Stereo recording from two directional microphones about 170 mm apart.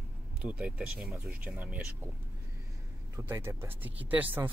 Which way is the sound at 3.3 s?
15° right (ahead or behind).